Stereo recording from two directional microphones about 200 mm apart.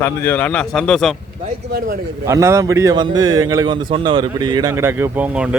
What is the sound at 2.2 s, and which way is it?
Speech, 15° right (ahead or behind).